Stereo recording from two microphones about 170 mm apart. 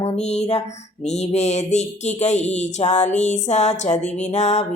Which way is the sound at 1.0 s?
40° left (ahead or behind).